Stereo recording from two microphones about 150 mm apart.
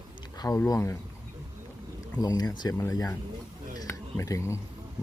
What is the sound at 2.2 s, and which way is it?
Speech, 25° left (ahead or behind).